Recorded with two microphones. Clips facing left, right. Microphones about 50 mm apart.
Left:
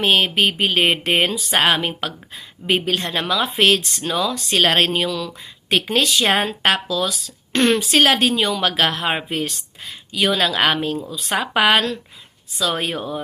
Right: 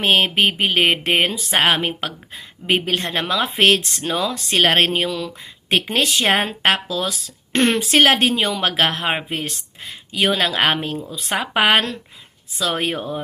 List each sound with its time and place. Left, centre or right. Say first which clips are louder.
0.0 s speech: even; right